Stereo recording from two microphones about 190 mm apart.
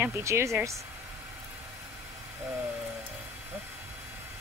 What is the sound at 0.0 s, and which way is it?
Speech, 15° right (ahead or behind).